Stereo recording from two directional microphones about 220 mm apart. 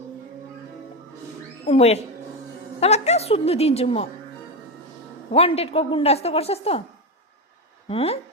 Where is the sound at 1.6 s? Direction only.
25° left (ahead or behind).